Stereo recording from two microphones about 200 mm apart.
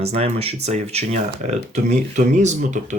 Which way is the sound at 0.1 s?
30° right (ahead or behind).